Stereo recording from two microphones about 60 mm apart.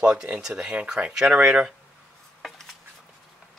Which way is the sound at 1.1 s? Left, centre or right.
Centre.